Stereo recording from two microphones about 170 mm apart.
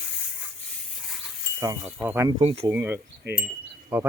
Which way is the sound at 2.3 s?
30° right (ahead or behind).